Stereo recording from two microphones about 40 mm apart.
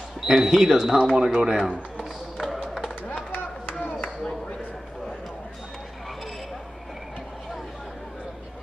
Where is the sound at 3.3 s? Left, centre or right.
Left.